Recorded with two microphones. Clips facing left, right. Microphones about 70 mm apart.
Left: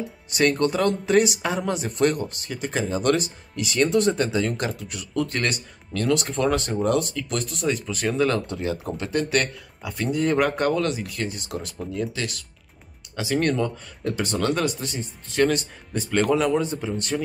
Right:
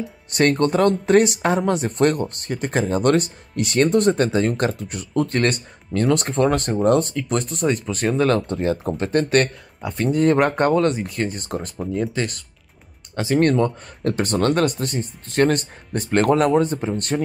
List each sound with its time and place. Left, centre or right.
0.3 s speech: right
14.0 s speech: right